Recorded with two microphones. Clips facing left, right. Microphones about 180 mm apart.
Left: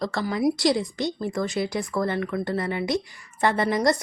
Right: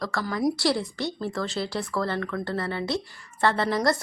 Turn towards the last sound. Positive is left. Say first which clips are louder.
# left 2 dB
turn(degrees=15)  # may be behind; listen again after turning